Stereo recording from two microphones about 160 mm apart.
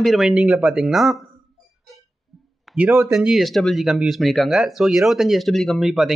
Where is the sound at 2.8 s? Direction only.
15° right (ahead or behind).